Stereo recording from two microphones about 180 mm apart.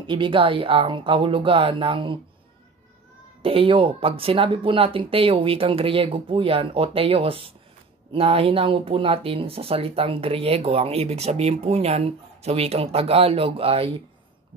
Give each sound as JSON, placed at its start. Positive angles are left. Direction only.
{"t": 0.0, "sound": "speech", "side_deg": -25}
{"t": 3.4, "sound": "speech", "side_deg": -30}